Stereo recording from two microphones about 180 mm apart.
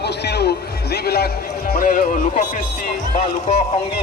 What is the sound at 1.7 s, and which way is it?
Speech, 50° left (ahead or behind).